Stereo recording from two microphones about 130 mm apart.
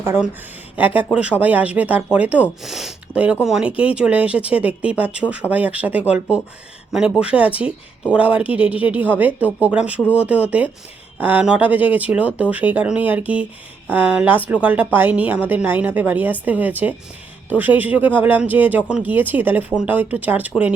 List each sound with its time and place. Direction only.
0.0 s speech: 20° right (ahead or behind)